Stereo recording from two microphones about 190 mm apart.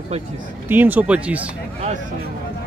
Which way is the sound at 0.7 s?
10° right (ahead or behind).